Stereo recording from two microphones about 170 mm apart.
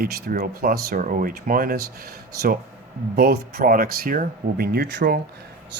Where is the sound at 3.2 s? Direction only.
70° right (ahead or behind); by 5.2 s 90° right.